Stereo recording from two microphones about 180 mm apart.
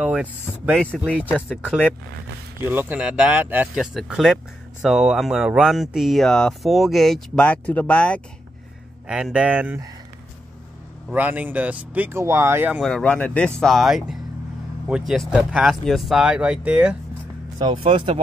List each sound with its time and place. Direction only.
0.0 s speech: 5° right (ahead or behind)
9.0 s speech: 5° right (ahead or behind)
11.1 s speech: 10° right (ahead or behind)
12.8 s speech: 5° left (ahead or behind)
17.6 s speech: 25° right (ahead or behind)